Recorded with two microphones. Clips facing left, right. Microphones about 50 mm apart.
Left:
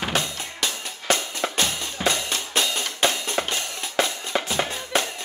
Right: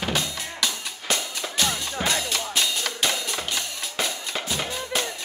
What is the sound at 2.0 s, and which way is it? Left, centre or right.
Drum, left.